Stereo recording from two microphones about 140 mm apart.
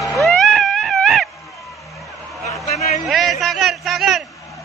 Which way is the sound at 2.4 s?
55° left (ahead or behind).